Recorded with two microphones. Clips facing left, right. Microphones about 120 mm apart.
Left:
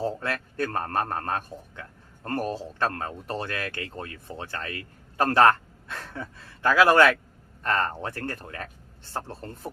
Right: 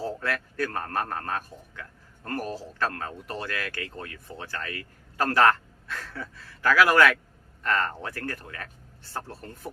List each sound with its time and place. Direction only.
0.0 s a man's voice: 25° left (ahead or behind)